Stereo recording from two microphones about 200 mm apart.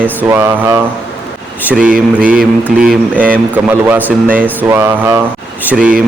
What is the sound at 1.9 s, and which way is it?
Mantra, 45° right (ahead or behind).